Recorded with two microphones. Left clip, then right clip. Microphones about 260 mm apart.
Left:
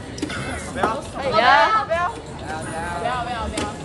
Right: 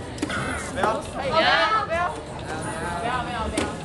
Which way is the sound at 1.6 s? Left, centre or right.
Left.